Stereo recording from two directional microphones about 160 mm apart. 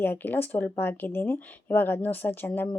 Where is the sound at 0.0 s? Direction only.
10° left (ahead or behind).